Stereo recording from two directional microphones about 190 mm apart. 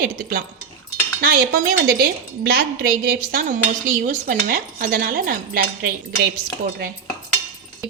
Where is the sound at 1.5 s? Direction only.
50° right (ahead or behind).